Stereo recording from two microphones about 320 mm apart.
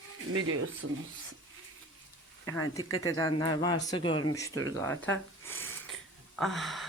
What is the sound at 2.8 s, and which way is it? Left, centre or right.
Speech, left.